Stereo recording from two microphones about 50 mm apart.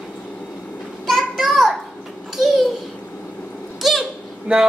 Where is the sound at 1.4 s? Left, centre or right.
Centre.